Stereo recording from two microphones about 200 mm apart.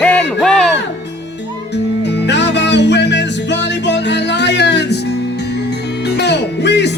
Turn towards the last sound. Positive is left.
turn(degrees=60)  # may be behind; listen again after turning